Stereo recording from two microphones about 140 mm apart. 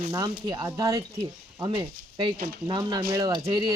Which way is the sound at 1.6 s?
35° right (ahead or behind).